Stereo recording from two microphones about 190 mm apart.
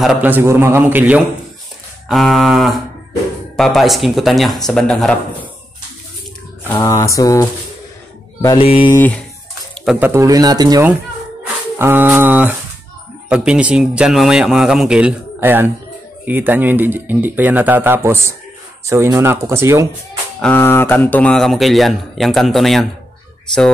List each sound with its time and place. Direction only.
0.0 s speech: 5° right (ahead or behind)
6.7 s mantra: 15° left (ahead or behind)
8.5 s speech: 30° left (ahead or behind)
8.9 s mantra: 10° left (ahead or behind)
9.8 s speech: 10° right (ahead or behind)
20.3 s speech: 10° left (ahead or behind)